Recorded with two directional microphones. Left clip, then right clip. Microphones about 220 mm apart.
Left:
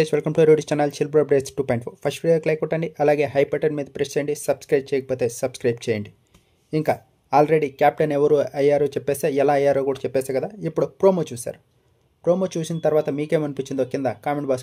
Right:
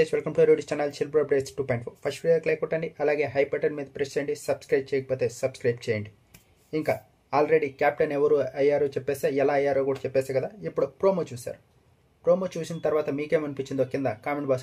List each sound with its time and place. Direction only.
0.0 s speech: 50° left (ahead or behind)